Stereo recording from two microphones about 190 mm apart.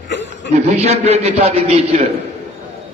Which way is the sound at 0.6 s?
35° right (ahead or behind).